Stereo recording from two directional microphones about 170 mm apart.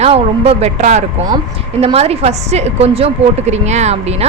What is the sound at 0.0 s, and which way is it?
A woman's voice, 40° right (ahead or behind).